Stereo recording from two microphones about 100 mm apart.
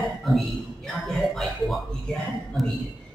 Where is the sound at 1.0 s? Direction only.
Centre (ahead or behind).